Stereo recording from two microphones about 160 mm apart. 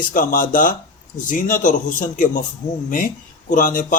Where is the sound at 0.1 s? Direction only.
60° left (ahead or behind).